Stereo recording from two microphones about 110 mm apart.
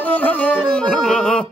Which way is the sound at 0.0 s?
15° left (ahead or behind).